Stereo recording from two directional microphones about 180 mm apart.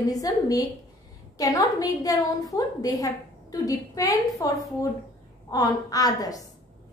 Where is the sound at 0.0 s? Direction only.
20° left (ahead or behind).